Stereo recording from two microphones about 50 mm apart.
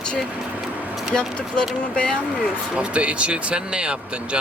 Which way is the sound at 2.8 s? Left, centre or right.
Right.